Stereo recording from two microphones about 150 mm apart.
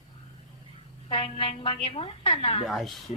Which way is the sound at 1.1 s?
40° left (ahead or behind).